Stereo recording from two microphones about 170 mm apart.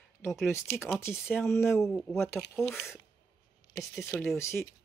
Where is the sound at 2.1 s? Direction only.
15° left (ahead or behind).